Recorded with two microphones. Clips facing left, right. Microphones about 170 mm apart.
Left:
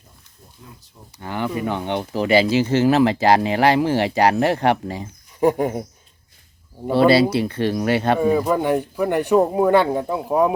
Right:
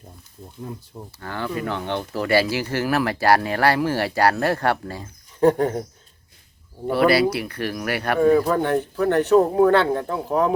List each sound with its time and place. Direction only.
1.2 s speech: 15° left (ahead or behind)
6.9 s speech: 25° left (ahead or behind)
8.2 s speech: 10° left (ahead or behind)